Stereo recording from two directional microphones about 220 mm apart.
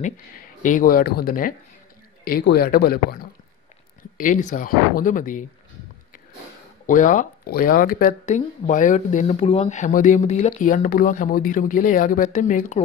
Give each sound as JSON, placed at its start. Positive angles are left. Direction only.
{"t": 0.0, "sound": "speech", "side_deg": 35}
{"t": 6.9, "sound": "speech", "side_deg": 35}